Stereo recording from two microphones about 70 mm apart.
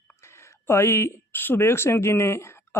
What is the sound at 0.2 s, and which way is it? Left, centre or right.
Speech, left.